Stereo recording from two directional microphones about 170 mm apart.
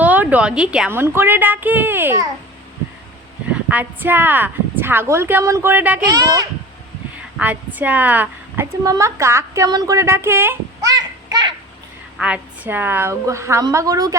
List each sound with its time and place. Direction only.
0.0 s a woman's voice: 10° right (ahead or behind)
3.5 s a woman's voice: 10° right (ahead or behind)
6.1 s a child's voice: 20° right (ahead or behind)
7.3 s a woman's voice: 10° right (ahead or behind)
12.1 s a woman's voice: 5° right (ahead or behind)